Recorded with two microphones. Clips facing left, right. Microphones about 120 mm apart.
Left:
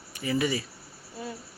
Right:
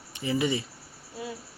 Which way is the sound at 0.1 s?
25° right (ahead or behind).